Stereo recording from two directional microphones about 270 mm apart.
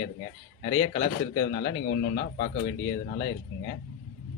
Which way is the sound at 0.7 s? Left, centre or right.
Left.